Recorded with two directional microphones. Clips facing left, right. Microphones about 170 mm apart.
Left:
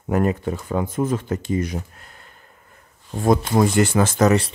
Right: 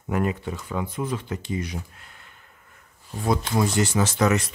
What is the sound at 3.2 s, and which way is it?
Speech, 50° left (ahead or behind).